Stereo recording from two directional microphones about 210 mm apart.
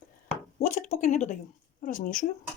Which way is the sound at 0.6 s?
35° left (ahead or behind).